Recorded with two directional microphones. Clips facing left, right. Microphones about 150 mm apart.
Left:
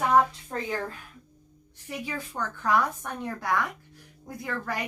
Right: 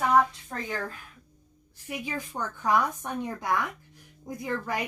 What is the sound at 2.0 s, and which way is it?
A woman's voice, 15° right (ahead or behind).